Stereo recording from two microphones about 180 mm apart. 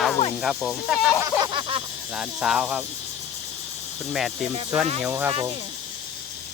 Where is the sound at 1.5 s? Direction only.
30° right (ahead or behind).